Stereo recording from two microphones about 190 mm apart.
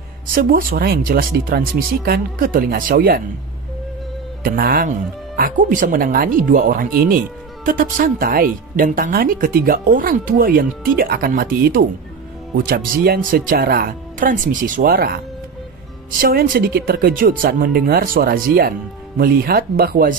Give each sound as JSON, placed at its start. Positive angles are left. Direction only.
{"t": 0.3, "sound": "speech", "side_deg": -50}
{"t": 4.4, "sound": "speech", "side_deg": -50}